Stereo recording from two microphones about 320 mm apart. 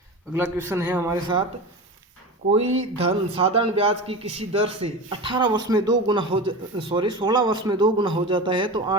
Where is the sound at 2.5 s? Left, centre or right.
Centre.